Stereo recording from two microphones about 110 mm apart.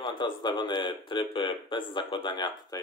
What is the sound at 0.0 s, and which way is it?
A man's voice, 45° left (ahead or behind).